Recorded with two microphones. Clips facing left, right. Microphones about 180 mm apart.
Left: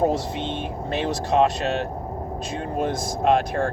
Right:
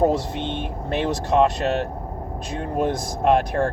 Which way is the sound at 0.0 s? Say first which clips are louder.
Right 2 dB; 55° right (ahead or behind).